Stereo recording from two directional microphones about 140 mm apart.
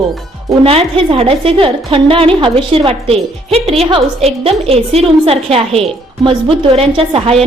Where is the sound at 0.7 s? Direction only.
40° right (ahead or behind).